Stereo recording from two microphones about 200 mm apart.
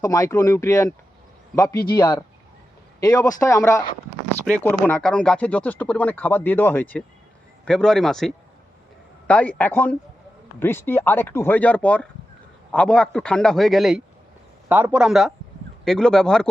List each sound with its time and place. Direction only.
0.0 s speech: 15° left (ahead or behind)
1.7 s speech: 50° left (ahead or behind)
2.0 s a man's voice: 15° left (ahead or behind)